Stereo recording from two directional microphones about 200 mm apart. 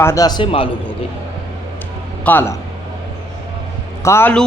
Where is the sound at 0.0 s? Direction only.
15° left (ahead or behind).